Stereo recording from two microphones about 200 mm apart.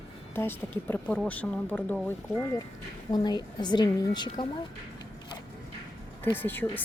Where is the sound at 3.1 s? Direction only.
20° left (ahead or behind).